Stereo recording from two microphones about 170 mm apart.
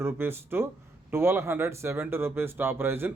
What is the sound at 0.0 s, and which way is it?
Speech, 15° right (ahead or behind).